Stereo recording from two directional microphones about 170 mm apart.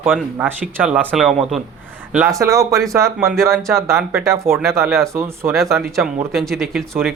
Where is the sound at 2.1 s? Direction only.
15° right (ahead or behind).